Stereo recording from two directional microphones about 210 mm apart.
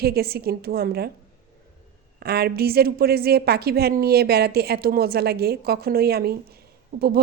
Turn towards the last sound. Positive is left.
turn(degrees=-45)  # may be behind; listen again after turning